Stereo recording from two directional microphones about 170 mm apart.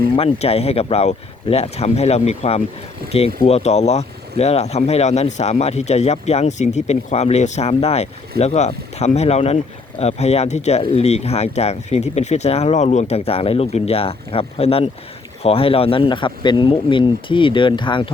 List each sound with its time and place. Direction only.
0.2 s speech: 35° left (ahead or behind)